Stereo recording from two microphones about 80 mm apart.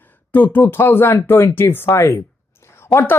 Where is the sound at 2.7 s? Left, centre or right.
Left.